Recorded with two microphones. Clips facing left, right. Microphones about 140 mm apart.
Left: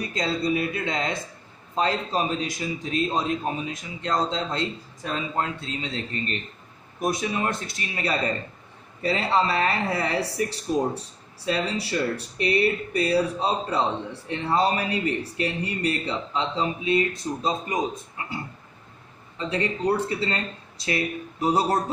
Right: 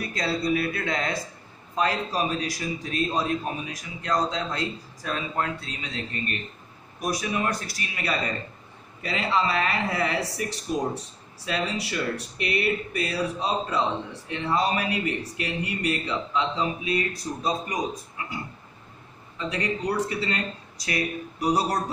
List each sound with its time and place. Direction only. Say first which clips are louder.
0.0 s a man's voice: left 1 dB; 20° left (ahead or behind)